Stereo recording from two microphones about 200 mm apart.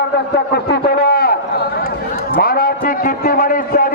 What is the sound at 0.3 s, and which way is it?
A man's voice, 55° left (ahead or behind).